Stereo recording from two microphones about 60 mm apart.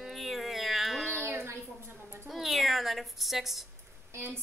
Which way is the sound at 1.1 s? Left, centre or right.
Right.